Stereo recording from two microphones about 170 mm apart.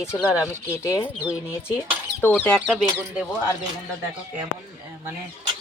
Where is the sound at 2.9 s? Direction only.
10° right (ahead or behind).